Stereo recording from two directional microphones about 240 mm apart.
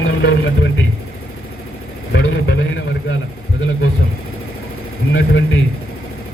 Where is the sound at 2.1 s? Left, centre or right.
Left.